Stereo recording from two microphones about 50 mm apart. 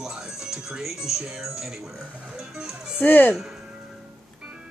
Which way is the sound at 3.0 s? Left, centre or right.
Left.